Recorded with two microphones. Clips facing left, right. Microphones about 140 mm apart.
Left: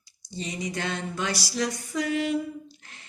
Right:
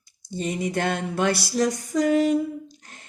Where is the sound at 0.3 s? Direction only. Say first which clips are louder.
Right 6 dB; 50° right (ahead or behind).